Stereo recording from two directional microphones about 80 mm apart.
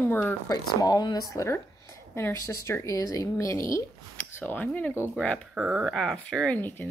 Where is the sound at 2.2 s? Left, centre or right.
Left.